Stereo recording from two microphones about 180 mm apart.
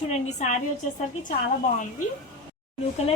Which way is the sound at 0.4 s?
40° left (ahead or behind).